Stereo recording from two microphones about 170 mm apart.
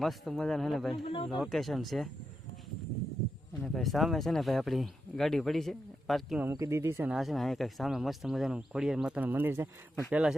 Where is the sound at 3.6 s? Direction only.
Centre (ahead or behind).